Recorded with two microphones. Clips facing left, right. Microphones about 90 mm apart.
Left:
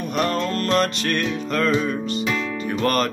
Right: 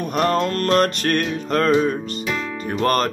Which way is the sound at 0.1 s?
40° right (ahead or behind).